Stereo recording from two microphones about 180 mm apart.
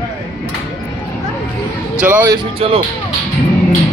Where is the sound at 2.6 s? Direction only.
30° right (ahead or behind).